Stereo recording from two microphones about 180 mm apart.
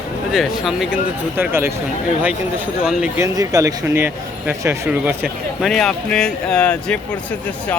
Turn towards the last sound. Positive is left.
turn(degrees=5)  # may be behind; listen again after turning